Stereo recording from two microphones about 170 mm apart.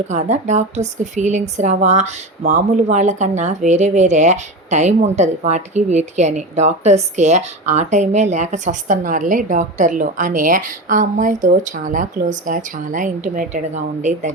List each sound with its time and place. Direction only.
0.1 s a woman's voice: 45° right (ahead or behind)